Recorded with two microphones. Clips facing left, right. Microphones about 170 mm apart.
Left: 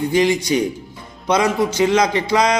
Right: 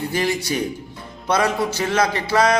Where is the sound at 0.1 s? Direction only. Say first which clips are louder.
Left 7 dB; 15° left (ahead or behind).